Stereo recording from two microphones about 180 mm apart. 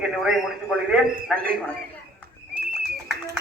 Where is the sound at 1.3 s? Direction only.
55° right (ahead or behind).